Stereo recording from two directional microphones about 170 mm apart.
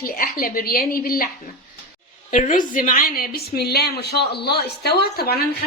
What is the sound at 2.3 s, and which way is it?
A woman's voice, 50° left (ahead or behind).